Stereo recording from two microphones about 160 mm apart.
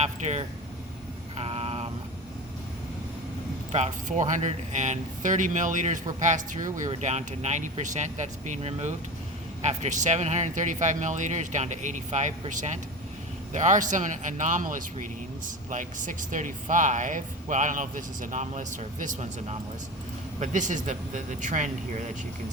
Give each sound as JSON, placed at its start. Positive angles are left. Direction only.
{"t": 0.0, "sound": "speech", "side_deg": -45}
{"t": 1.4, "sound": "vehicle", "side_deg": -40}
{"t": 3.7, "sound": "speech", "side_deg": -45}